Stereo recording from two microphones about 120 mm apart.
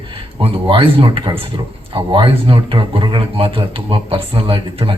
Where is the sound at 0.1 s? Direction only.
50° right (ahead or behind).